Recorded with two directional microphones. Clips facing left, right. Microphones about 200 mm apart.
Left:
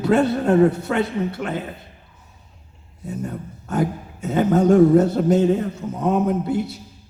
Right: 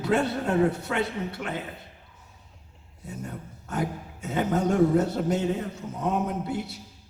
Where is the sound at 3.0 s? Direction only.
45° left (ahead or behind).